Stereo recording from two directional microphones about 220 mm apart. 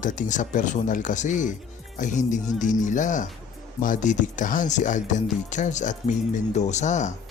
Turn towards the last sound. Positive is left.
turn(degrees=35)  # may be behind; listen again after turning